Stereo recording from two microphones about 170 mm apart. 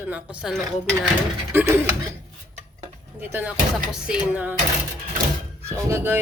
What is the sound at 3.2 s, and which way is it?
Cutlery, 10° right (ahead or behind).